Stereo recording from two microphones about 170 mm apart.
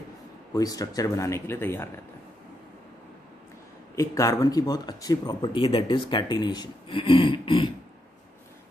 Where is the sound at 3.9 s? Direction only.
20° left (ahead or behind).